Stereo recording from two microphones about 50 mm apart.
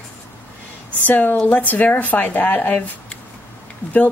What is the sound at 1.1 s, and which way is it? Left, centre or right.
Speech, left.